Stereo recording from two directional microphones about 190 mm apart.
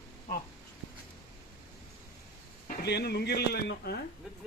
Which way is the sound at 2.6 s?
60° left (ahead or behind).